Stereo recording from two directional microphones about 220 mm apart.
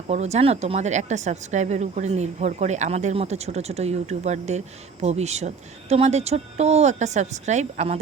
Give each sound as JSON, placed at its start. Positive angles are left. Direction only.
{"t": 0.1, "sound": "speech", "side_deg": -30}